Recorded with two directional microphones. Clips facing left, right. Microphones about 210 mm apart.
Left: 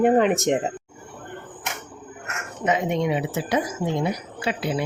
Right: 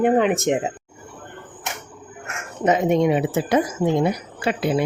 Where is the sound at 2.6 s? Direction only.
45° right (ahead or behind).